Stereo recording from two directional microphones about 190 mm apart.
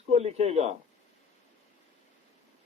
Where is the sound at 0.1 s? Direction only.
35° right (ahead or behind).